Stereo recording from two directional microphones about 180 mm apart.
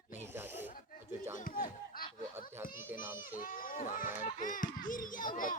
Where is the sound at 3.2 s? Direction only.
50° left (ahead or behind).